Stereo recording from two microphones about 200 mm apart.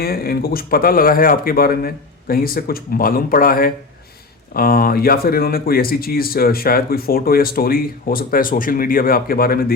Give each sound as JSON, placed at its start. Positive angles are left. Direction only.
{"t": 0.0, "sound": "speech", "side_deg": 50}